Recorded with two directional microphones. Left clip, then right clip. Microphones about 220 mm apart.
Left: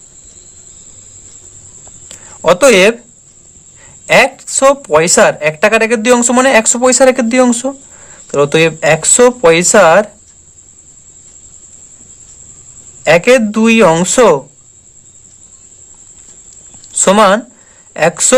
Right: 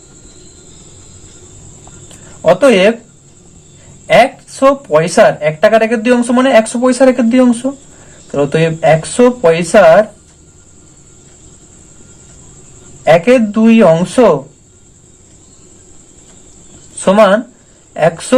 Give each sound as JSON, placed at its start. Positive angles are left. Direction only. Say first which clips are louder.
{"t": 2.0, "sound": "a sound", "louder": "even", "side_deg": 45}
{"t": 4.0, "sound": "speech", "louder": "even", "side_deg": 40}
{"t": 13.1, "sound": "speech", "louder": "even", "side_deg": 40}
{"t": 17.0, "sound": "speech", "louder": "even", "side_deg": 45}